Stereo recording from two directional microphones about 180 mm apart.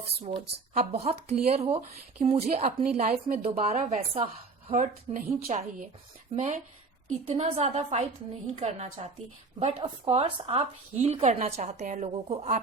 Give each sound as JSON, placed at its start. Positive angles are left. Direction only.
{"t": 0.2, "sound": "speech", "side_deg": -35}